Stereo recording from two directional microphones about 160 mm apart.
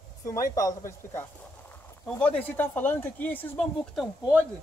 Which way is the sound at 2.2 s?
10° left (ahead or behind).